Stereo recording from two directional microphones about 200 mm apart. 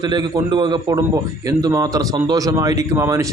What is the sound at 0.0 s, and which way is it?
A man's voice, 20° right (ahead or behind).